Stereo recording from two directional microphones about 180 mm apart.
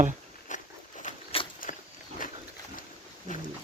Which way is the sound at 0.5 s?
45° left (ahead or behind).